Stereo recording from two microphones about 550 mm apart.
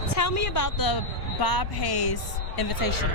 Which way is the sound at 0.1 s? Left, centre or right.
Left.